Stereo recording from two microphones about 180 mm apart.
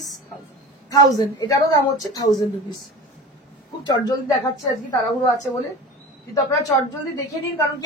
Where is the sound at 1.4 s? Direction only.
20° left (ahead or behind).